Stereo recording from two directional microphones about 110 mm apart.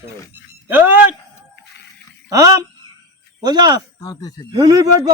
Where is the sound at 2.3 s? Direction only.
35° right (ahead or behind).